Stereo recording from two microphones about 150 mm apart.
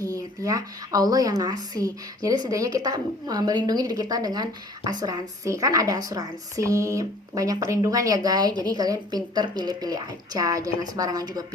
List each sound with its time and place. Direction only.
0.0 s a woman's voice: 25° right (ahead or behind)